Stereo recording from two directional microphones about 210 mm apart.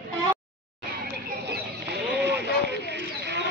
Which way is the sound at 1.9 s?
55° right (ahead or behind).